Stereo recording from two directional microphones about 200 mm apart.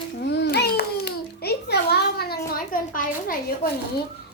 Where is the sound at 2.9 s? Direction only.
45° left (ahead or behind).